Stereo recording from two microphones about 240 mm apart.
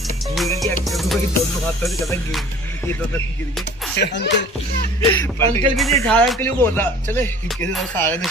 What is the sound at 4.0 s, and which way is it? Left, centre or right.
Speech, left.